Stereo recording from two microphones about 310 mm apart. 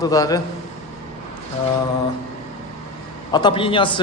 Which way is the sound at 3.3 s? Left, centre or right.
Centre.